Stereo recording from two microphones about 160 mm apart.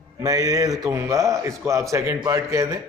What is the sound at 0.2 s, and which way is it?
A man's voice, 20° right (ahead or behind).